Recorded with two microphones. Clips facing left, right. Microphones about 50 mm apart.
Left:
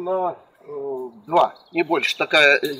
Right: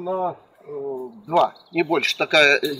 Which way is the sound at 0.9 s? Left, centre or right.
Centre.